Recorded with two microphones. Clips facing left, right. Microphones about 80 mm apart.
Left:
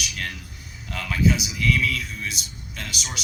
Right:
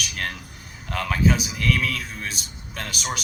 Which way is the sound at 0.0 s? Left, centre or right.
Right.